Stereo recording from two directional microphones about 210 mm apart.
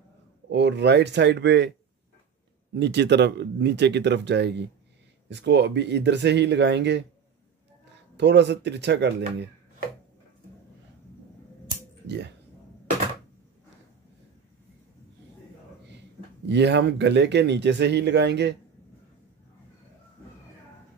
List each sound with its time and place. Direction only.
0.5 s speech: 55° right (ahead or behind)
2.7 s speech: 55° right (ahead or behind)
8.2 s speech: 55° right (ahead or behind)
16.4 s speech: 55° right (ahead or behind)